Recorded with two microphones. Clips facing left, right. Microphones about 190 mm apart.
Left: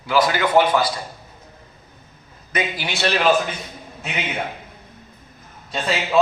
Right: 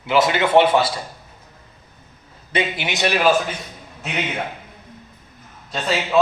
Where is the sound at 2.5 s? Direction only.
25° right (ahead or behind).